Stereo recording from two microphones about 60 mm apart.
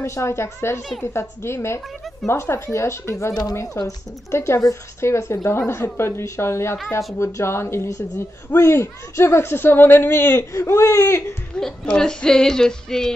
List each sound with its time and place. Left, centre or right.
0.0 s a woman's voice: left
3.7 s a woman's voice: left
10.5 s a woman's voice: left
11.5 s speech: centre